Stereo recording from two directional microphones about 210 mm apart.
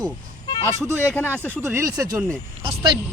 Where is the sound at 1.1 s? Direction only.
10° left (ahead or behind).